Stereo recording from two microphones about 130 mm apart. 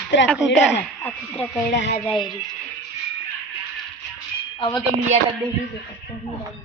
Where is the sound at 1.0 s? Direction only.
15° left (ahead or behind).